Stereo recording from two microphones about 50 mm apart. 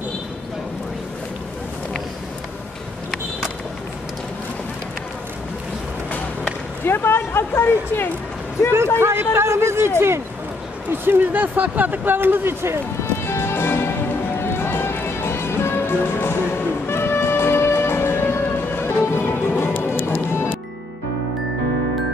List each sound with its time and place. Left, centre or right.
6.8 s speech: left
8.7 s speech: right
10.9 s speech: right
13.2 s music: left